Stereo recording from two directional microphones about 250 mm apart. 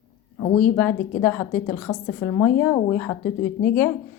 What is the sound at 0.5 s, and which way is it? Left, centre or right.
A woman's voice, centre.